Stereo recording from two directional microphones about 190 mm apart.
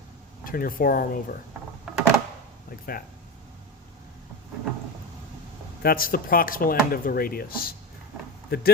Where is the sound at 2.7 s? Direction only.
50° left (ahead or behind).